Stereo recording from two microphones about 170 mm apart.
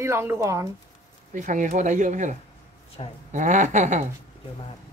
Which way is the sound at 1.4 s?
50° right (ahead or behind).